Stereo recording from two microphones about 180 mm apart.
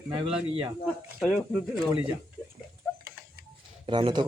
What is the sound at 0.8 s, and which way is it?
Speech, centre (ahead or behind).